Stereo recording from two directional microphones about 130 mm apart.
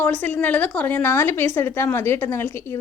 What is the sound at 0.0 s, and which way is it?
A woman's voice, 10° left (ahead or behind).